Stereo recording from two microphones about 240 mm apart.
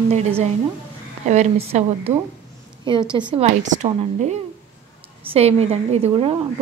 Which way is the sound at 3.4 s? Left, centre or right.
Right.